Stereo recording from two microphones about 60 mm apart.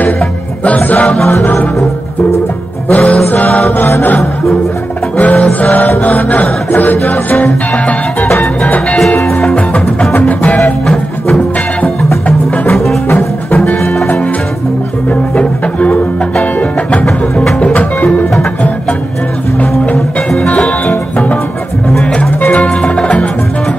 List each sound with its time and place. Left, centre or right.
0.7 s music: left
1.0 s music: centre
1.4 s music: left
2.9 s music: left
5.1 s music: left
10.1 s music: left
10.6 s music: centre
15.0 s music: left
17.0 s music: centre
17.7 s music: left
20.3 s music: centre